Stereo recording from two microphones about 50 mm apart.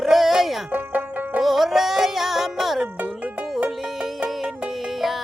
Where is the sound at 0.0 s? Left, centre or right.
Centre.